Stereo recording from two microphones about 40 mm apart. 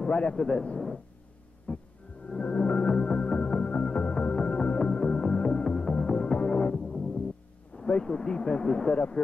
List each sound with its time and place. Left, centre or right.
0.3 s a man's voice: centre
1.7 s music: left
7.9 s a man's voice: left